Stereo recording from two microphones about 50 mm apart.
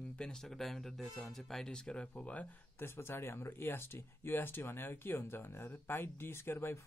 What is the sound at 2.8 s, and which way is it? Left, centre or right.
Speech, left.